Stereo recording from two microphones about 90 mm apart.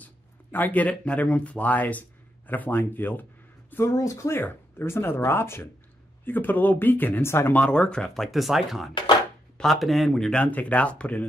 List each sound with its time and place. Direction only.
0.0 s speech: 20° left (ahead or behind)
3.7 s speech: 35° left (ahead or behind)
7.5 s speech: 10° left (ahead or behind)